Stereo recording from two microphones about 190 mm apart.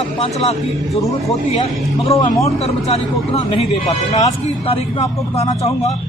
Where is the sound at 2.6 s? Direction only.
35° left (ahead or behind).